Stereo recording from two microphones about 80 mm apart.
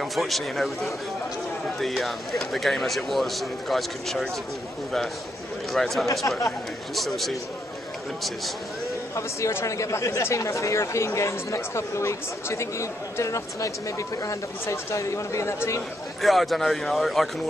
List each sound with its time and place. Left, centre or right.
0.0 s speech: centre
5.7 s speech: centre
6.2 s speech: left
7.0 s speech: centre
9.1 s speech: left
16.2 s speech: centre